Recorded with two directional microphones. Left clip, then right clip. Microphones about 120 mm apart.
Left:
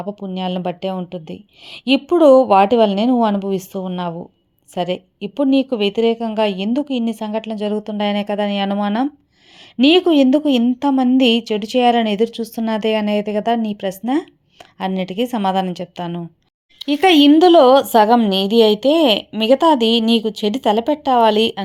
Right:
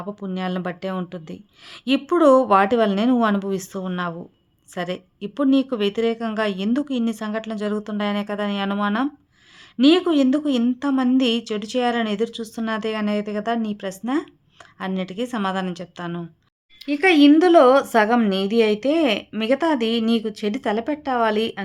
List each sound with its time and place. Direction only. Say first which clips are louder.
0.0 s a woman's voice: left 4 dB; 20° left (ahead or behind)
7.9 s speech: left 6 dB; 30° left (ahead or behind)
16.7 s speech: left 5 dB; 60° left (ahead or behind)
17.3 s a woman's voice: left 4 dB; 30° left (ahead or behind)